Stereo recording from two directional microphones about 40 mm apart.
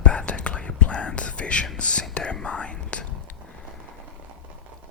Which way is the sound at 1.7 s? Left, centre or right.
Left.